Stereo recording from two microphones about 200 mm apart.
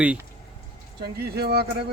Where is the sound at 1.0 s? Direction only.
55° right (ahead or behind).